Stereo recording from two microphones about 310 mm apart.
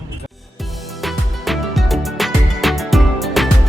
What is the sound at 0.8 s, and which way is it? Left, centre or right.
Music, centre.